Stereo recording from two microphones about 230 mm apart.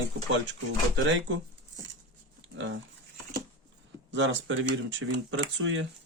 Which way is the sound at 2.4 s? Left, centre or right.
Right.